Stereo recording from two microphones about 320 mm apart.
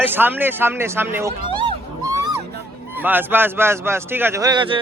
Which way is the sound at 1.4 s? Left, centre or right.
Centre.